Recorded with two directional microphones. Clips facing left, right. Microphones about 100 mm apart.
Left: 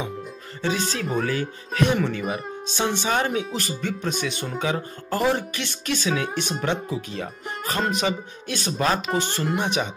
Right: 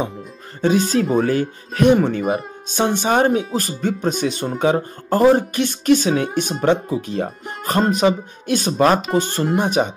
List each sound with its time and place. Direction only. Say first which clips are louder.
0.6 s speech: right 9 dB; 45° right (ahead or behind)